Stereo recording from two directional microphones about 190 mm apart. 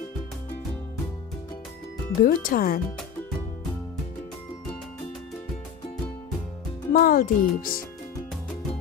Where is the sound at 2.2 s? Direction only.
45° left (ahead or behind).